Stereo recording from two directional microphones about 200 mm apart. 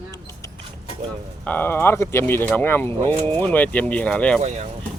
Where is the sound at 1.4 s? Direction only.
10° left (ahead or behind).